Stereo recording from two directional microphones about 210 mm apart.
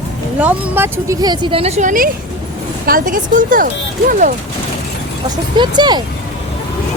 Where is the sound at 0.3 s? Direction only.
10° right (ahead or behind); by 3.7 s 40° right (ahead or behind).